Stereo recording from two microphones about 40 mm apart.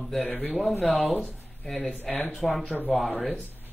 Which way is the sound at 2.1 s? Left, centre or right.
Left.